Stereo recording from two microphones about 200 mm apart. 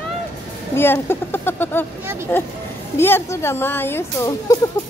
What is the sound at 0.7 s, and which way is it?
A woman's voice, 10° left (ahead or behind).